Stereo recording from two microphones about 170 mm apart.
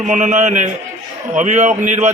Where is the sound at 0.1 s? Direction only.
45° right (ahead or behind).